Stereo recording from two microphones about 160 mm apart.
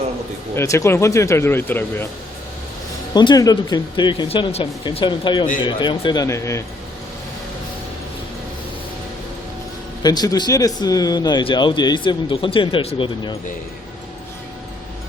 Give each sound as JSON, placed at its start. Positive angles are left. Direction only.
{"t": 0.5, "sound": "speech", "side_deg": 15}
{"t": 3.2, "sound": "speech", "side_deg": 25}
{"t": 10.0, "sound": "speech", "side_deg": 25}